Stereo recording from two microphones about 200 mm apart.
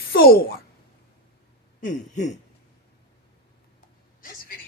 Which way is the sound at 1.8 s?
40° left (ahead or behind).